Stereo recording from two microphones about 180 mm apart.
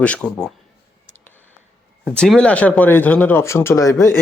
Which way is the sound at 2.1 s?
Centre (ahead or behind).